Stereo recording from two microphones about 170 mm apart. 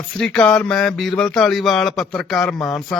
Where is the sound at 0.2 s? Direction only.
5° left (ahead or behind).